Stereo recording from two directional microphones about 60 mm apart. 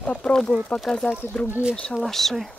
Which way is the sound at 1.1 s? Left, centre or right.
Left.